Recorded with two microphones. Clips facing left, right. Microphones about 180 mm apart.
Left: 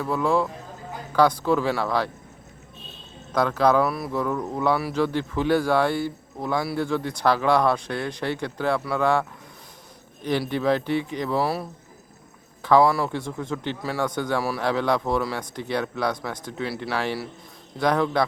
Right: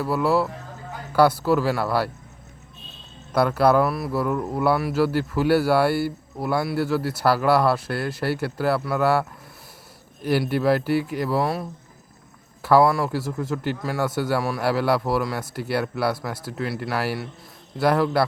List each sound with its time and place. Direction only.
0.0 s speech: 5° right (ahead or behind)
3.3 s speech: 10° right (ahead or behind)
10.2 s a man's voice: 5° right (ahead or behind)